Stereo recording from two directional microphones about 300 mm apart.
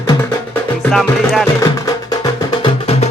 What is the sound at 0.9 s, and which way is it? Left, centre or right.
Music, centre.